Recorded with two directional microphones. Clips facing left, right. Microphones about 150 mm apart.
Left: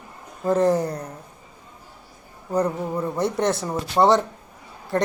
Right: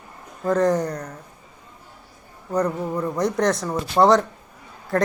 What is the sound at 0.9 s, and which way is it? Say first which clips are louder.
Speech: even; 30° left (ahead or behind).